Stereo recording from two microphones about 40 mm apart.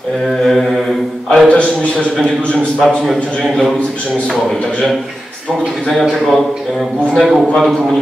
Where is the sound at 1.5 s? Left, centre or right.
Left.